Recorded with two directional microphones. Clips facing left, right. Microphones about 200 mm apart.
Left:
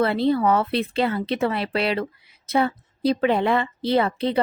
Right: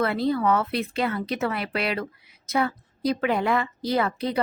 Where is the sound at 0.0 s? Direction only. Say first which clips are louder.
Left 3 dB; 30° left (ahead or behind).